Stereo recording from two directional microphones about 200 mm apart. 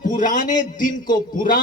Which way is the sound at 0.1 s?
40° left (ahead or behind).